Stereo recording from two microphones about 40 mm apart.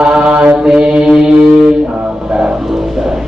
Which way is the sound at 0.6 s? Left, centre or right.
Right.